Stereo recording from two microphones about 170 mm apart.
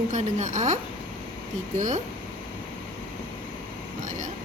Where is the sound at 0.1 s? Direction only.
45° right (ahead or behind).